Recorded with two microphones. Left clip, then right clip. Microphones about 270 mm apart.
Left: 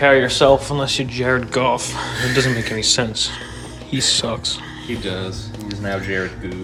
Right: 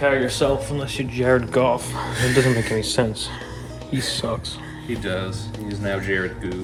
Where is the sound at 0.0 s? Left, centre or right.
Left.